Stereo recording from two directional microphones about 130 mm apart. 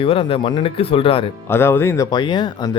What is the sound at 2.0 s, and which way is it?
Speech, 35° left (ahead or behind).